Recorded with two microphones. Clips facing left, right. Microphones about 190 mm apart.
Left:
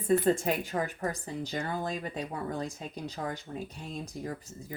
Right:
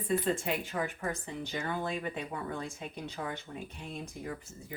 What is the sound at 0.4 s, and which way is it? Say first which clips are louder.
Speech: left 3 dB; 40° left (ahead or behind).